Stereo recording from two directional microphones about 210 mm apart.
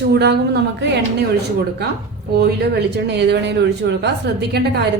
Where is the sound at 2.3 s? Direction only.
50° right (ahead or behind).